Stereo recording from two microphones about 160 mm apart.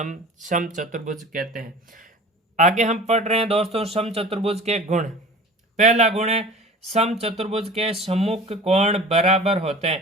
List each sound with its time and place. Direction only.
0.0 s speech: 50° right (ahead or behind)
2.6 s speech: 50° right (ahead or behind)